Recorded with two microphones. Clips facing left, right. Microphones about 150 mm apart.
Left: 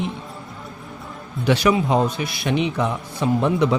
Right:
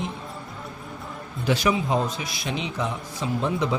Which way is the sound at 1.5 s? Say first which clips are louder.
Left 5 dB; 70° left (ahead or behind).